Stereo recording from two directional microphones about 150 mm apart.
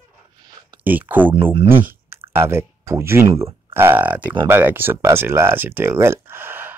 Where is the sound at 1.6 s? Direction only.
15° right (ahead or behind).